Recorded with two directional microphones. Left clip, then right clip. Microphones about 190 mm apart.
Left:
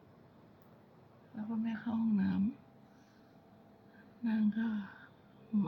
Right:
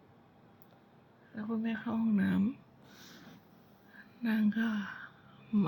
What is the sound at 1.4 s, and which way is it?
Speech, 25° right (ahead or behind).